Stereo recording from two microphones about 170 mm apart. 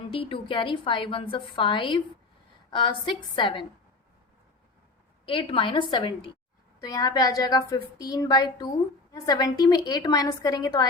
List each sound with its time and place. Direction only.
0.1 s a woman's voice: 30° left (ahead or behind)
5.2 s a woman's voice: 30° left (ahead or behind)